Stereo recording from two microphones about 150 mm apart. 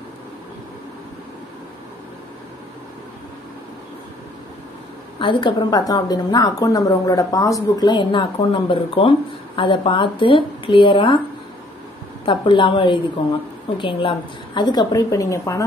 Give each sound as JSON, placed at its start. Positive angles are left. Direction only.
{"t": 5.2, "sound": "a woman's voice", "side_deg": 30}
{"t": 12.3, "sound": "a woman's voice", "side_deg": 35}